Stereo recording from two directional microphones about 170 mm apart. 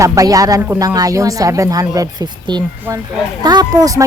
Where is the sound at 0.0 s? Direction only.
20° right (ahead or behind).